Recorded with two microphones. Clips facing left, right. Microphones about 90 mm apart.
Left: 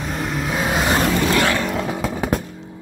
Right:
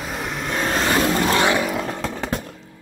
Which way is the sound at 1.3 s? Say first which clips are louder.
Even; 20° right (ahead or behind).